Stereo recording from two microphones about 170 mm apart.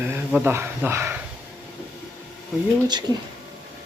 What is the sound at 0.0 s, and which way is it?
Speech, 10° right (ahead or behind).